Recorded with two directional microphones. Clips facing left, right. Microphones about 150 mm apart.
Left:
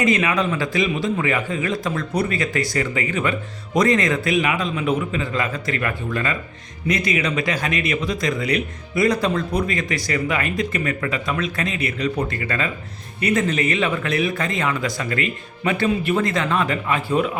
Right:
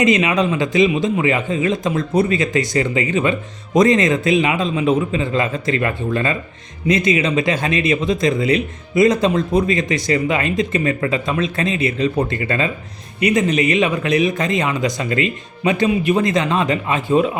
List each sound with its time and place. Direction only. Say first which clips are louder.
0.0 s speech: right 4 dB; 20° right (ahead or behind)